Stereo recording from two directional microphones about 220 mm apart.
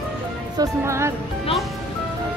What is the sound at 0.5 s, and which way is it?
Speech, 10° right (ahead or behind).